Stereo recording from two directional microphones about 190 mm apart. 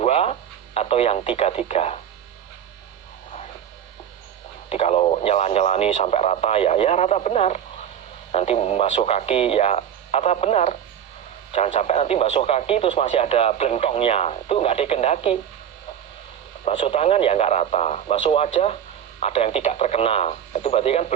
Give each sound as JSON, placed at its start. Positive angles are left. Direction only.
{"t": 0.0, "sound": "speech", "side_deg": 30}
{"t": 4.7, "sound": "speech", "side_deg": 35}
{"t": 16.6, "sound": "speech", "side_deg": 30}